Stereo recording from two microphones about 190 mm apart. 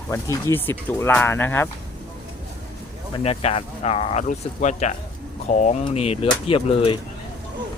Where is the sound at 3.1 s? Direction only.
30° left (ahead or behind).